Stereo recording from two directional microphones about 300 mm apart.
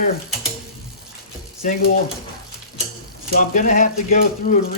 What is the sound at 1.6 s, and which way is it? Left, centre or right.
Speech, left.